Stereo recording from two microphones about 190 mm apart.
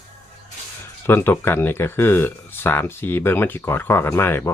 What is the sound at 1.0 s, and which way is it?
Speech, 10° left (ahead or behind).